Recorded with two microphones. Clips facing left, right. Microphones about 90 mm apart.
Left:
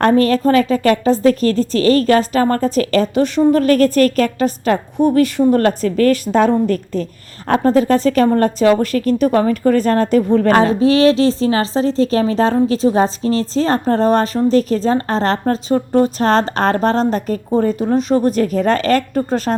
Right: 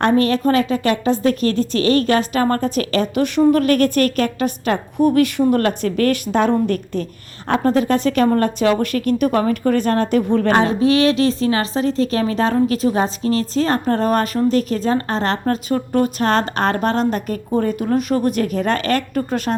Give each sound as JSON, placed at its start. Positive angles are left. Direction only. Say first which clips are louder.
{"t": 0.0, "sound": "a woman's voice", "louder": "left 3 dB", "side_deg": 40}